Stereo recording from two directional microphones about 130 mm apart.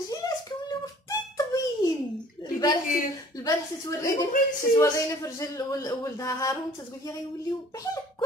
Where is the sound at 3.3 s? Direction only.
30° left (ahead or behind).